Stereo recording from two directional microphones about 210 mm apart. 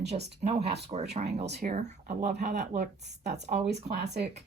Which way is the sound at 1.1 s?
30° right (ahead or behind).